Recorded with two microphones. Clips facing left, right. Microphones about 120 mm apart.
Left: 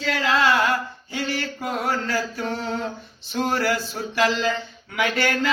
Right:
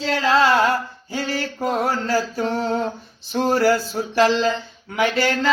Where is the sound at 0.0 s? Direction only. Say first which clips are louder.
Right 4 dB; 35° right (ahead or behind).